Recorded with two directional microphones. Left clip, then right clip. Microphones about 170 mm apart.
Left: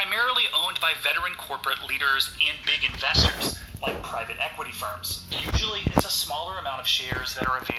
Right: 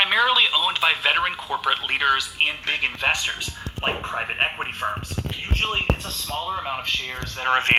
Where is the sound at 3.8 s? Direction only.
40° right (ahead or behind).